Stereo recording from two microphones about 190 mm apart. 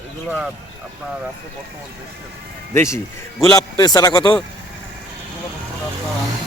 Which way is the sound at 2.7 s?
15° left (ahead or behind).